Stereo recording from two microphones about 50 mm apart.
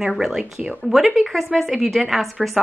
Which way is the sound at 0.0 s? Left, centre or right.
Centre.